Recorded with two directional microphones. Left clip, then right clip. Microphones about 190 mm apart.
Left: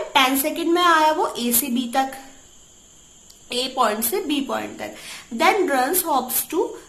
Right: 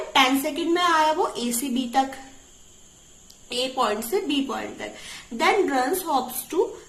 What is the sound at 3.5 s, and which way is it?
A woman's voice, 25° left (ahead or behind).